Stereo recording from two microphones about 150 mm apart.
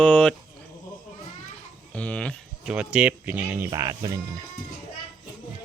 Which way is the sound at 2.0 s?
10° left (ahead or behind).